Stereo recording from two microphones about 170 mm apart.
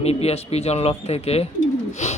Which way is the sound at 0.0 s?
40° left (ahead or behind).